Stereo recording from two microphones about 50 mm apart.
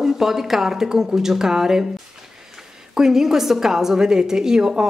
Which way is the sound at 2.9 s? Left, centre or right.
Centre.